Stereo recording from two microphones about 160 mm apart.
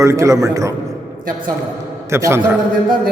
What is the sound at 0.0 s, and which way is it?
Speech, 20° right (ahead or behind).